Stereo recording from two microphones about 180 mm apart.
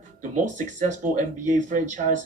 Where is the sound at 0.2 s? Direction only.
45° right (ahead or behind).